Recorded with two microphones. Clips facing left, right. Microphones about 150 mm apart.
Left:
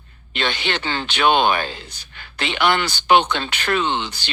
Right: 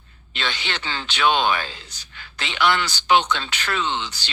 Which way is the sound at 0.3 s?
55° left (ahead or behind).